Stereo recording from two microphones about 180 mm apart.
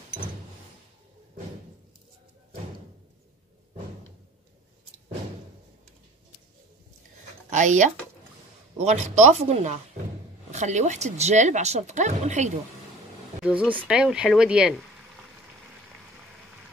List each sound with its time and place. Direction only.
7.4 s speech: 45° right (ahead or behind)
13.4 s speech: 5° right (ahead or behind)